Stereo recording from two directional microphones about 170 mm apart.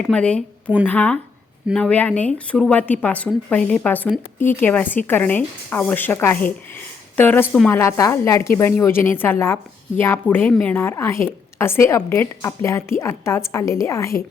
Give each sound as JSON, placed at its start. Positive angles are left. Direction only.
{"t": 0.0, "sound": "a woman's voice", "side_deg": 5}